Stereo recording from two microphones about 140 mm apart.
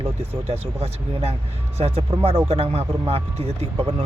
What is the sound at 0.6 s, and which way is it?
Speech, 45° right (ahead or behind).